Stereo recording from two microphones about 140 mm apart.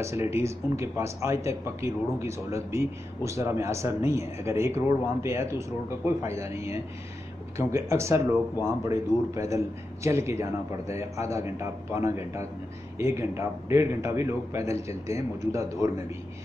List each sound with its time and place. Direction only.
0.0 s speech: 20° right (ahead or behind)